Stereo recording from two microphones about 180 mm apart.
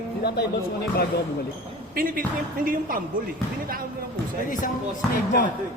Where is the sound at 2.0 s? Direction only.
50° right (ahead or behind).